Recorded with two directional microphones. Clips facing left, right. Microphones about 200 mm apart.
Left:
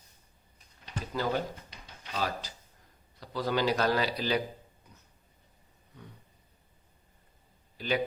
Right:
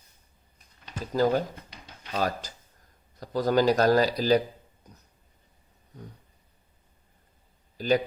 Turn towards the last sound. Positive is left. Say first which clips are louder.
# right 8 dB
turn(degrees=-40)  # may be behind; listen again after turning